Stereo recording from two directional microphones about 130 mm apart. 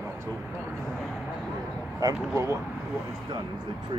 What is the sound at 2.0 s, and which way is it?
Speech, 25° right (ahead or behind).